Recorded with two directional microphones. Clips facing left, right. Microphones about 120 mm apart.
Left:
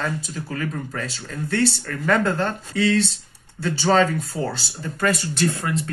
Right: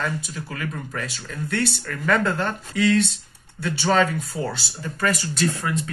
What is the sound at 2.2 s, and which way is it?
Speech, 25° left (ahead or behind).